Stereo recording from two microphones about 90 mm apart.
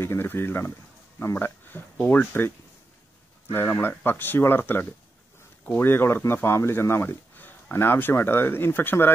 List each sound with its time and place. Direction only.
0.0 s speech: 25° left (ahead or behind)
3.5 s speech: 25° left (ahead or behind)